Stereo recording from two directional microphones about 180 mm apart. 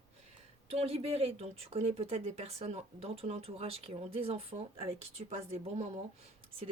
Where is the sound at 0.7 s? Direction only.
35° right (ahead or behind).